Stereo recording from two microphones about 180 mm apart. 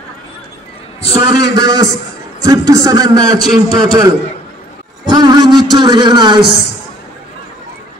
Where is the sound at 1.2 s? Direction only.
20° right (ahead or behind).